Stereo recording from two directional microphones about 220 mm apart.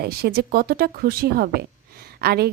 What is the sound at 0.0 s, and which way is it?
A woman's voice, 45° right (ahead or behind).